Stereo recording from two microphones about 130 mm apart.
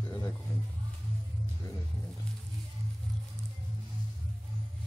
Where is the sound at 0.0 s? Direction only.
25° left (ahead or behind).